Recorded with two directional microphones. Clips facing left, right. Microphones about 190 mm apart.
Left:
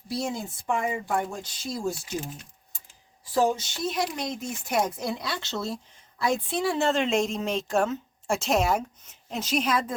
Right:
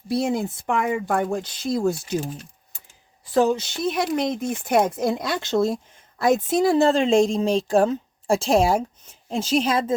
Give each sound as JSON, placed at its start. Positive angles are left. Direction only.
{"t": 0.1, "sound": "speech", "side_deg": -60}
{"t": 3.3, "sound": "speech", "side_deg": -65}